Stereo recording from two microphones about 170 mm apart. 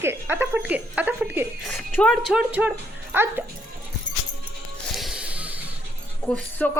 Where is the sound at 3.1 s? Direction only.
15° right (ahead or behind).